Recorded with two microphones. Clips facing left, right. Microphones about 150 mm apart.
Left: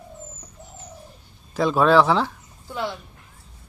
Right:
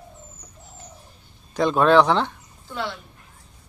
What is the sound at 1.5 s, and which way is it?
Speech, centre (ahead or behind).